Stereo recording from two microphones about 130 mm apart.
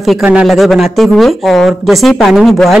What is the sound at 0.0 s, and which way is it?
Speech, 5° right (ahead or behind).